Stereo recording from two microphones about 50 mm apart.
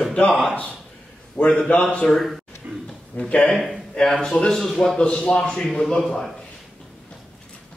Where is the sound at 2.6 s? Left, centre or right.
Right.